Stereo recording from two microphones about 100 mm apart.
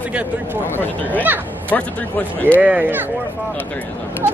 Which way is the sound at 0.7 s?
20° left (ahead or behind).